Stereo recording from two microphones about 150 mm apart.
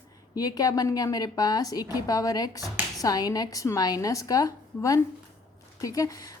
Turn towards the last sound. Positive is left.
turn(degrees=25)  # may be behind; listen again after turning